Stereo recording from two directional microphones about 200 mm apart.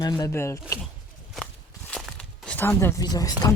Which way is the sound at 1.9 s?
5° left (ahead or behind).